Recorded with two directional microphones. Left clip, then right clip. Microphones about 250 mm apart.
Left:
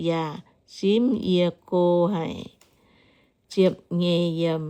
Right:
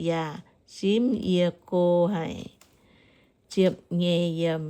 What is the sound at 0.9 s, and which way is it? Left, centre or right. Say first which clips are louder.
Speech: left 3 dB; centre.